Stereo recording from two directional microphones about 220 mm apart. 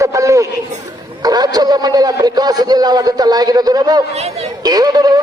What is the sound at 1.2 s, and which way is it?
A man's voice, 15° right (ahead or behind).